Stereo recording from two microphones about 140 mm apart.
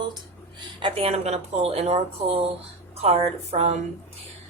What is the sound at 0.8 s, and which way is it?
Speech, 45° right (ahead or behind).